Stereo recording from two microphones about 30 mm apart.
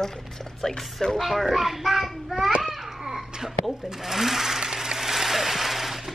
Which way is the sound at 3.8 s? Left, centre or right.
Centre.